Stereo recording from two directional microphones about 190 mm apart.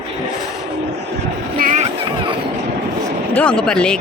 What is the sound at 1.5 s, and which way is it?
Music, 40° right (ahead or behind).